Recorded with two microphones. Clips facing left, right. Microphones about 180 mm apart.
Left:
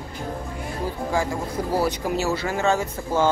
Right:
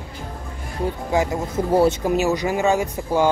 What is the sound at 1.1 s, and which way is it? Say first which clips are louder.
Speech: right 4 dB; 20° right (ahead or behind).